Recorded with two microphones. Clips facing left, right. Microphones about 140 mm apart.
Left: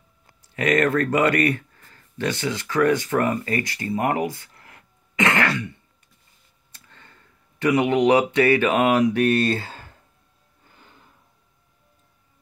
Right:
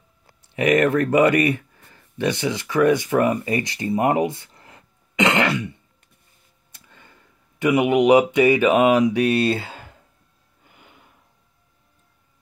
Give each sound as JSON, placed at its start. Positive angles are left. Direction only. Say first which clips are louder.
{"t": 0.4, "sound": "speech", "louder": "right 3 dB", "side_deg": -20}
{"t": 10.7, "sound": "music", "louder": "right 1 dB", "side_deg": -15}